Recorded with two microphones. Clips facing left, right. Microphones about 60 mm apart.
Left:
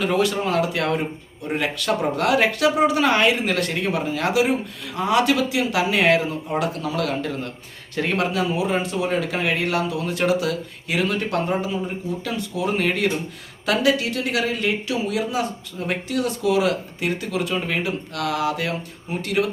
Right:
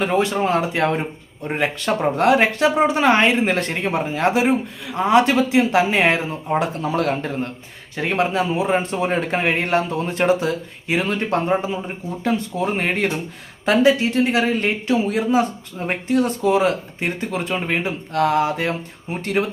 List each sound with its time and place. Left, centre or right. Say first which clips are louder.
0.0 s speech: right 2 dB; right